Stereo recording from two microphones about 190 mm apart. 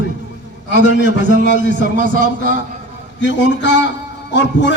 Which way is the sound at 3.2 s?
65° left (ahead or behind).